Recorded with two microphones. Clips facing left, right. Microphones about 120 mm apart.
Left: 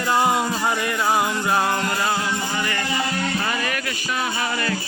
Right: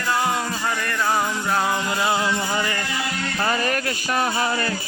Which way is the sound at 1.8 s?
10° right (ahead or behind).